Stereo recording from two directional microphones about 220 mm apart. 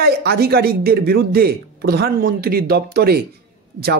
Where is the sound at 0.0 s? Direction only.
45° right (ahead or behind).